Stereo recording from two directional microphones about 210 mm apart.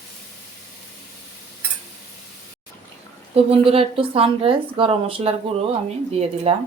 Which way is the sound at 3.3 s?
25° right (ahead or behind).